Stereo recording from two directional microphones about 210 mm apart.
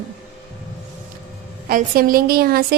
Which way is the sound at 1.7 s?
45° right (ahead or behind).